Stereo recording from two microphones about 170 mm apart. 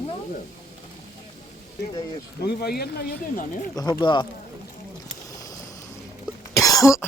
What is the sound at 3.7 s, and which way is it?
Speech, 20° left (ahead or behind).